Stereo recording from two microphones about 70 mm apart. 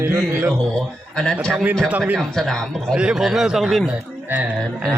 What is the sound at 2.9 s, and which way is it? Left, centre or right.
Speech, centre.